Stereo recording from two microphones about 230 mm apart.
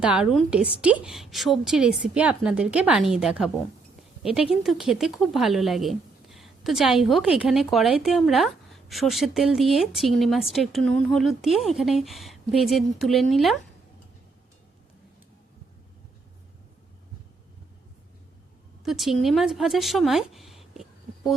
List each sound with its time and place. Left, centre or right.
0.0 s a woman's voice: centre
18.9 s speech: centre